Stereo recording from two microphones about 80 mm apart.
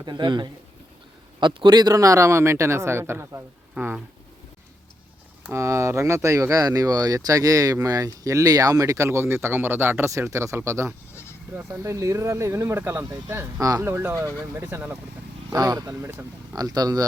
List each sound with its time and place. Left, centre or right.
0.0 s a man's voice: right
3.8 s speech: centre
5.5 s speech: right
9.0 s a man's voice: right
11.1 s bleat: left
11.8 s a man's voice: right
13.6 s speech: right
13.8 s speech: right
15.5 s speech: right
15.9 s speech: right
16.6 s speech: right